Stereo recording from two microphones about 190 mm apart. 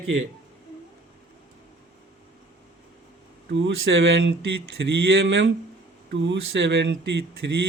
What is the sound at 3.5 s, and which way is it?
Mantra, 80° right.